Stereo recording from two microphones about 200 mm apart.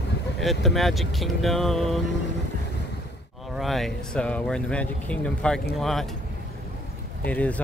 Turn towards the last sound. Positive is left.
turn(degrees=5)  # may be behind; listen again after turning